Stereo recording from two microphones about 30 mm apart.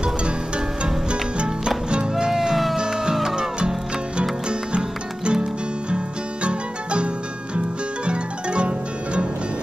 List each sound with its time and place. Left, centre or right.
1.9 s music: right
6.4 s music: right
7.5 s zither: right